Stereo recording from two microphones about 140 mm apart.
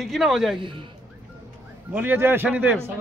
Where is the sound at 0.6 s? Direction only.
40° right (ahead or behind).